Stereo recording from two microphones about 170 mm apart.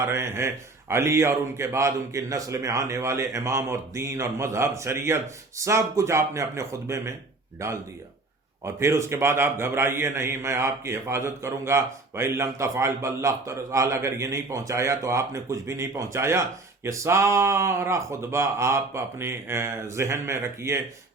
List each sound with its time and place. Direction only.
0.0 s speech: 15° right (ahead or behind)